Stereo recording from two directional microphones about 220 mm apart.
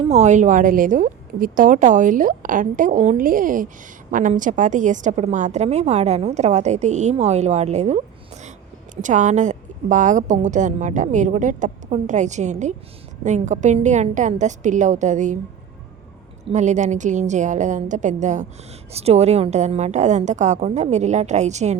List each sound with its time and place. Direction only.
0.1 s a woman's voice: 30° right (ahead or behind)
9.0 s a woman's voice: 35° right (ahead or behind)
16.5 s a woman's voice: 30° right (ahead or behind)